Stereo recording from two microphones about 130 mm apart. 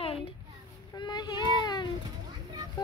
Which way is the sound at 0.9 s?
35° left (ahead or behind).